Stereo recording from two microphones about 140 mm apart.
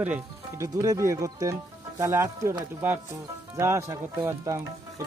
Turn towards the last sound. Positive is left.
turn(degrees=-20)  # may be behind; listen again after turning